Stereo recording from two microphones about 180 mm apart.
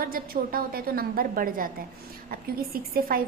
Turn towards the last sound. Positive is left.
turn(degrees=-55)  # may be behind; listen again after turning